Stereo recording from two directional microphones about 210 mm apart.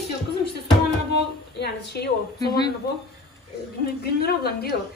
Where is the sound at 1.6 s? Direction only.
50° left (ahead or behind).